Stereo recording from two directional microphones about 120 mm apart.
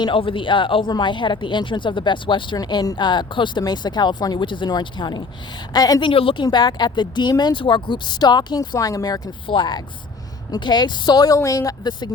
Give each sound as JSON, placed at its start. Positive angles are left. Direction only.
{"t": 0.0, "sound": "a woman's voice", "side_deg": 45}